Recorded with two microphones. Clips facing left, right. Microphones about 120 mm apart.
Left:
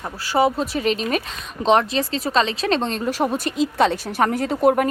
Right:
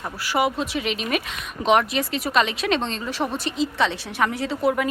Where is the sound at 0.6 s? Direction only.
40° left (ahead or behind).